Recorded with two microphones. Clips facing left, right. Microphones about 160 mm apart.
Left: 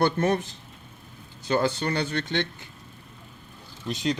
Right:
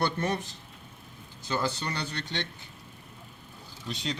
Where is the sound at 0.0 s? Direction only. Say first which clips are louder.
Left 6 dB; 50° left (ahead or behind).